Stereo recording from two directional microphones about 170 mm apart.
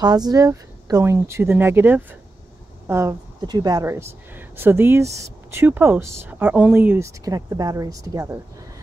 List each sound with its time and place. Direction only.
0.0 s speech: 25° right (ahead or behind)
7.2 s a woman's voice: 20° right (ahead or behind)